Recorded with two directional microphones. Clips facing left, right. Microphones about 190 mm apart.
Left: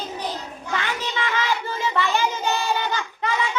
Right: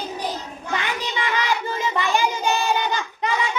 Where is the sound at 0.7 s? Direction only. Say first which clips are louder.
Right 1 dB; 15° right (ahead or behind).